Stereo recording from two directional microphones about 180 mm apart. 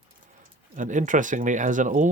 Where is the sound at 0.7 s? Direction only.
45° right (ahead or behind).